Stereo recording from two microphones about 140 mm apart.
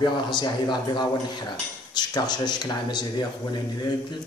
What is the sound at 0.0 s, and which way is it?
Speech, 30° left (ahead or behind).